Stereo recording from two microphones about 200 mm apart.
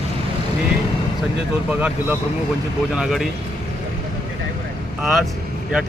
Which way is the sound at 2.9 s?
Centre (ahead or behind).